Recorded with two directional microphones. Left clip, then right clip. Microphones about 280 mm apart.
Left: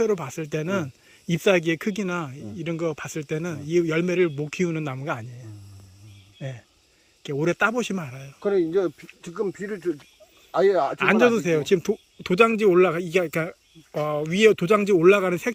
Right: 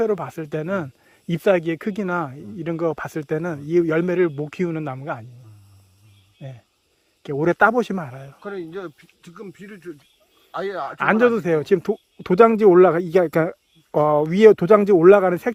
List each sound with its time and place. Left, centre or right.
0.0 s speech: centre
6.4 s speech: centre
8.4 s speech: left
10.5 s speech: left
10.9 s speech: centre